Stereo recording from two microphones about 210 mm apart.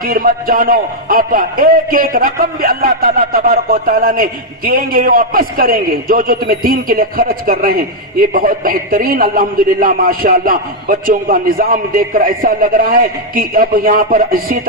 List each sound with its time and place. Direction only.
0.0 s a man's voice: 45° right (ahead or behind)